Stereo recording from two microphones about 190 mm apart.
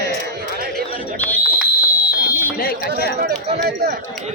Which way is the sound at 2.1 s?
20° left (ahead or behind).